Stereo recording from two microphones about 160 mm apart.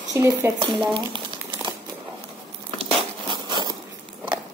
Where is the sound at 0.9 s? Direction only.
30° right (ahead or behind).